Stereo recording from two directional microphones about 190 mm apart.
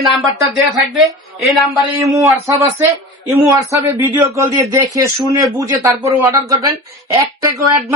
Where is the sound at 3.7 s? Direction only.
15° right (ahead or behind).